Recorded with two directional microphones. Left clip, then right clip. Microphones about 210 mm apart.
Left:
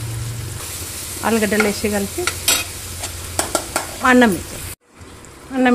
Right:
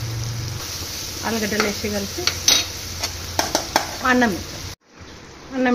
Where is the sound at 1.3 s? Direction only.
25° left (ahead or behind).